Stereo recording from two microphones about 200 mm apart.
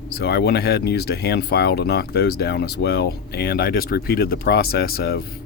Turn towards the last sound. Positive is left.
turn(degrees=50)  # may be behind; listen again after turning